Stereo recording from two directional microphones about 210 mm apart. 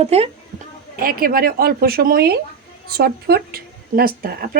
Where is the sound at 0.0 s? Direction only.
30° right (ahead or behind).